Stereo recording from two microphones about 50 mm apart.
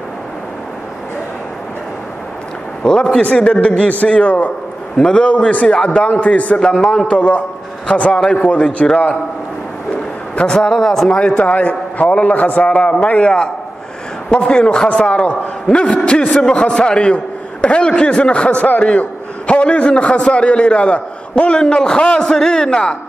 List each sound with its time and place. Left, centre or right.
2.8 s a man's voice: centre
7.2 s a man's voice: left; by 9.2 s centre
10.3 s a man's voice: centre
11.4 s a man's voice: left
14.5 s a man's voice: centre